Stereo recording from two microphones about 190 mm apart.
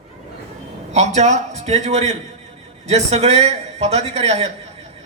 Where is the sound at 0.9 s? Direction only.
35° right (ahead or behind).